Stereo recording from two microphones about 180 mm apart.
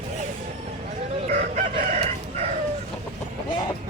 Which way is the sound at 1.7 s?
40° right (ahead or behind).